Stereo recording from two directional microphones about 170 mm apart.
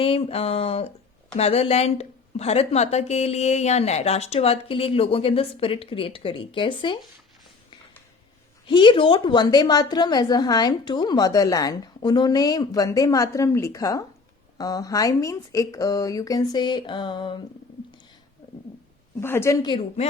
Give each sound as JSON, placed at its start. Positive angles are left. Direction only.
{"t": 0.0, "sound": "a woman's voice", "side_deg": 35}
{"t": 8.6, "sound": "a woman's voice", "side_deg": 30}
{"t": 19.2, "sound": "a woman's voice", "side_deg": 15}